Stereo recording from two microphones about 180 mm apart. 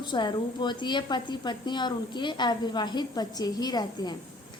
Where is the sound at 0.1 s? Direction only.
25° left (ahead or behind).